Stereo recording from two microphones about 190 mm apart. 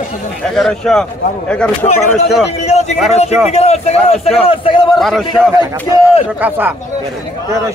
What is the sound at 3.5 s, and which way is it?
A man's voice, 35° left (ahead or behind).